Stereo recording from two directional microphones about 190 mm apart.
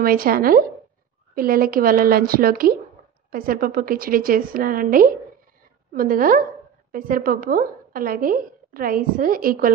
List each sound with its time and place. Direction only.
0.0 s a woman's voice: 50° right (ahead or behind)